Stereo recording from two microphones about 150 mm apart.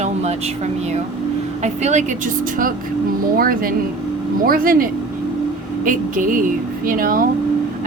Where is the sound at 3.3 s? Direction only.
75° right (ahead or behind).